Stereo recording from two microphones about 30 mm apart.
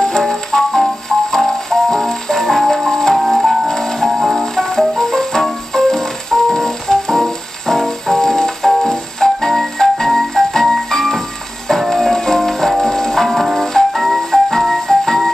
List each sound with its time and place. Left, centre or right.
0.2 s music: centre
2.4 s music: centre
2.9 s music: centre
3.2 s music: centre
3.6 s music: centre
4.1 s music: centre
4.4 s music: centre